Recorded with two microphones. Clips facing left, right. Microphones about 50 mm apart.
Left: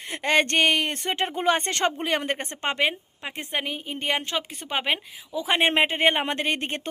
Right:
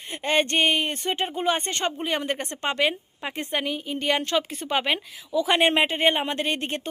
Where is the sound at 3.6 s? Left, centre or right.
Left.